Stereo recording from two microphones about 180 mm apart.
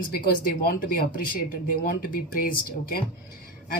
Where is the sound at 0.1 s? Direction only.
55° left (ahead or behind).